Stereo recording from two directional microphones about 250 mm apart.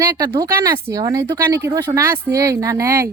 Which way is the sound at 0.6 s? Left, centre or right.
Centre.